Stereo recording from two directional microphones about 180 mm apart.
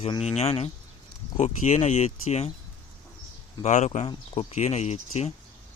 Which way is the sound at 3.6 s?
40° left (ahead or behind).